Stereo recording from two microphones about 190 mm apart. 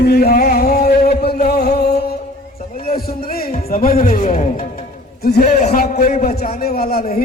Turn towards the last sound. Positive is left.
turn(degrees=50)  # may be behind; listen again after turning